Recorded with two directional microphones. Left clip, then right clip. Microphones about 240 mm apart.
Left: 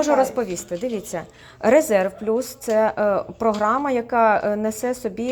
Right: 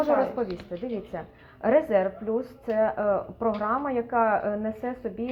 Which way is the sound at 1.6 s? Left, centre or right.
Left.